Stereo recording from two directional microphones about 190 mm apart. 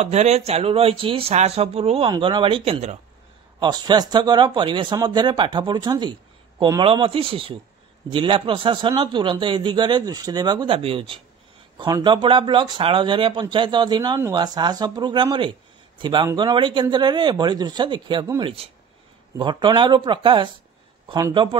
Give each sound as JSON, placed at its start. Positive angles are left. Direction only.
{"t": 0.0, "sound": "speech", "side_deg": -35}
{"t": 3.5, "sound": "speech", "side_deg": -20}